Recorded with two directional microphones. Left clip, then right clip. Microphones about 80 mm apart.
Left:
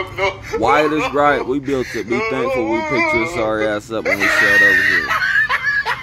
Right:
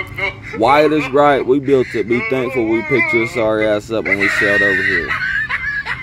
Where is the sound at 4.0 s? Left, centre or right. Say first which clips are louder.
Left 3 dB; centre.